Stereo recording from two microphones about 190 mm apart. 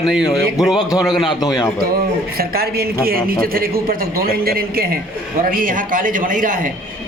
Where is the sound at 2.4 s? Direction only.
55° right (ahead or behind).